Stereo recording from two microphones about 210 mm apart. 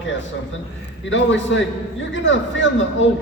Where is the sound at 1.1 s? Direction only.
60° left (ahead or behind).